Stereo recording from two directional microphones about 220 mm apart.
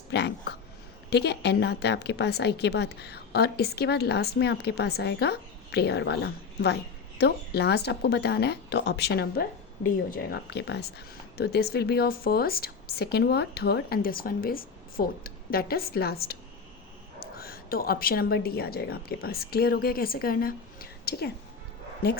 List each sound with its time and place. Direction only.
0.1 s a woman's voice: 50° left (ahead or behind)